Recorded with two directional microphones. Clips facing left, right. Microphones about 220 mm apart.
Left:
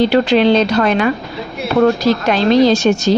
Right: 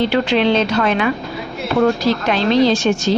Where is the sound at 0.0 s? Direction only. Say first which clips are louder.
Left 4 dB; 40° left (ahead or behind).